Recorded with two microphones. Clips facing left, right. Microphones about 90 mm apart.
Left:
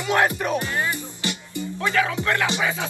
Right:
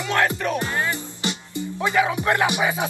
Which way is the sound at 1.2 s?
20° right (ahead or behind).